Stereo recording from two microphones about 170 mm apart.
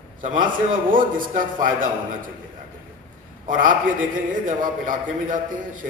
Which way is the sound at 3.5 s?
50° right (ahead or behind).